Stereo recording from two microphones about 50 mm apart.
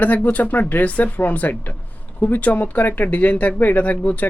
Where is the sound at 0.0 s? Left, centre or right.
Left.